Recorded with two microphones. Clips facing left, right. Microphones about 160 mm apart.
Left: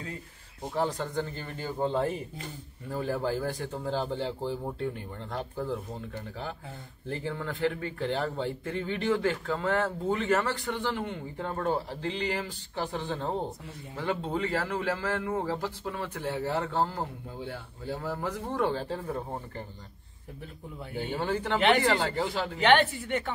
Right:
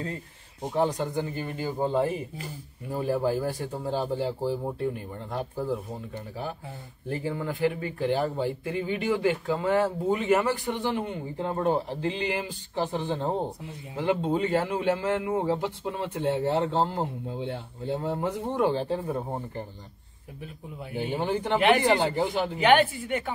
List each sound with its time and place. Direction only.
0.6 s a man's voice: 15° right (ahead or behind)
20.9 s speech: 15° right (ahead or behind)
22.6 s speech: 5° right (ahead or behind)